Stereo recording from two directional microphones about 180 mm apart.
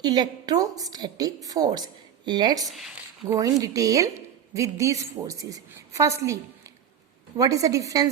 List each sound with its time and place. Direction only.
0.0 s a woman's voice: 25° right (ahead or behind)
2.6 s speech: centre (ahead or behind)
3.2 s a woman's voice: 20° right (ahead or behind)